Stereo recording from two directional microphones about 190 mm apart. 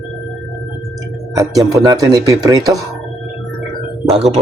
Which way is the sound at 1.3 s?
20° right (ahead or behind).